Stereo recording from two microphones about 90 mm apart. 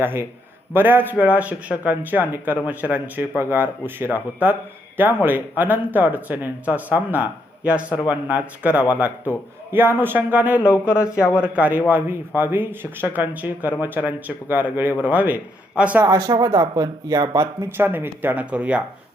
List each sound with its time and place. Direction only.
0.0 s a man's voice: 25° right (ahead or behind)
16.0 s speech: 40° right (ahead or behind)
17.4 s speech: 25° right (ahead or behind)